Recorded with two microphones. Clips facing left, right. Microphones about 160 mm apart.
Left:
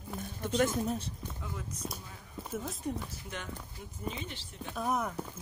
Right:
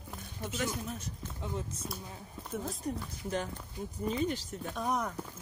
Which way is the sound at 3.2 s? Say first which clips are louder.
Right 7 dB; 35° right (ahead or behind).